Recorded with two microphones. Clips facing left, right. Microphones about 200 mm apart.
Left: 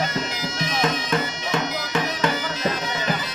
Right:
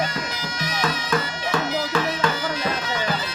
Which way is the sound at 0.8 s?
20° left (ahead or behind).